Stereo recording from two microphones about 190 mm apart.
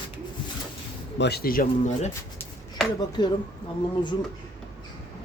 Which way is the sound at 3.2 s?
25° left (ahead or behind).